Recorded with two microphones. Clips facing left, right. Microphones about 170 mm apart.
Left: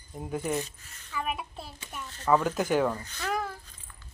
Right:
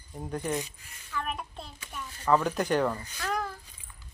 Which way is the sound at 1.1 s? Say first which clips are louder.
Left 1 dB; 5° left (ahead or behind).